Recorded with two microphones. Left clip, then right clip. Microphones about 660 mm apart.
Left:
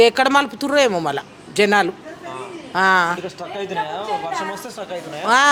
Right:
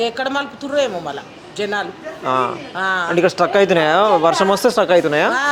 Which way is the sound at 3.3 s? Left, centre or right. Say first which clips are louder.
Right 14 dB; right.